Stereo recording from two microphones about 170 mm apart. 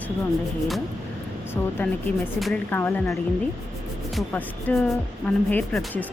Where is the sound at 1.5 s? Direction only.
10° left (ahead or behind).